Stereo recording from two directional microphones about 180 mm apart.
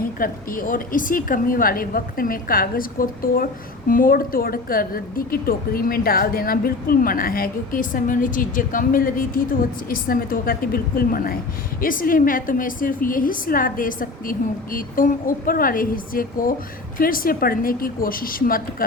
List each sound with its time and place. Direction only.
0.0 s a woman's voice: 50° left (ahead or behind)